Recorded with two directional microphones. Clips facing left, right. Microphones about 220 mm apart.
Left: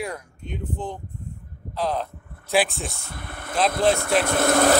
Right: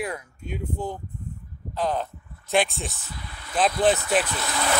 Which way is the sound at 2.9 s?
55° left (ahead or behind).